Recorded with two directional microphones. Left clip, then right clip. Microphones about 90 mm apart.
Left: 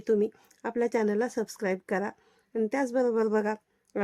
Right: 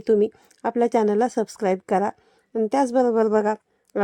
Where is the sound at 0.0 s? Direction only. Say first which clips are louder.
Right 7 dB; 60° right (ahead or behind).